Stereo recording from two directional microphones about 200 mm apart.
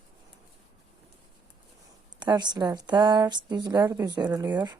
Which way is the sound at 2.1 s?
20° right (ahead or behind).